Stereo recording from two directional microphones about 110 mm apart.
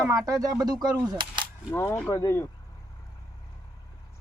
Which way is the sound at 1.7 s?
25° left (ahead or behind).